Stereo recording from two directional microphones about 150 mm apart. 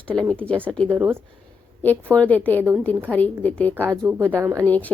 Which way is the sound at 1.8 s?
10° left (ahead or behind).